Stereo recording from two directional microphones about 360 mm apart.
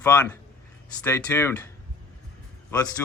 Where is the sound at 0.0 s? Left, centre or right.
Centre.